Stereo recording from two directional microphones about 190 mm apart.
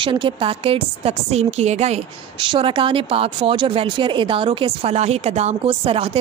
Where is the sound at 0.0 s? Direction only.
25° right (ahead or behind).